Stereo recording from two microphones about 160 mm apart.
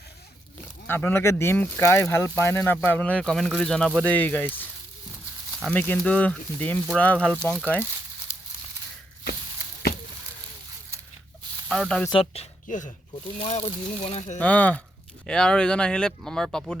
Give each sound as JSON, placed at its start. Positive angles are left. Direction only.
{"t": 0.9, "sound": "speech", "side_deg": 15}
{"t": 5.7, "sound": "speech", "side_deg": 10}
{"t": 11.7, "sound": "speech", "side_deg": 5}
{"t": 12.1, "sound": "speech", "side_deg": 40}
{"t": 12.6, "sound": "speech", "side_deg": 55}
{"t": 13.4, "sound": "speech", "side_deg": 40}
{"t": 14.3, "sound": "speech", "side_deg": 10}